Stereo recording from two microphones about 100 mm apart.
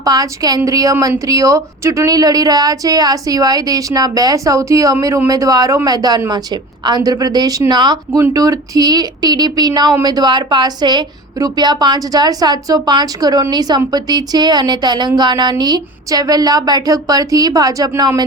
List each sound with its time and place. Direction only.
0.0 s speech: 40° right (ahead or behind)